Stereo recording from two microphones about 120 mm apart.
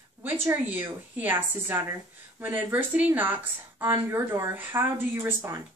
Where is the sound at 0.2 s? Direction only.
20° right (ahead or behind).